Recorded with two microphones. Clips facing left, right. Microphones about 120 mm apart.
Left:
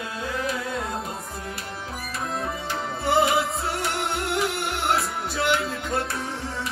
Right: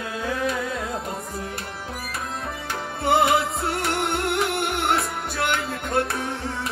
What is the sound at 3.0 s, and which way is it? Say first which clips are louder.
Music: right 2 dB; 55° right (ahead or behind).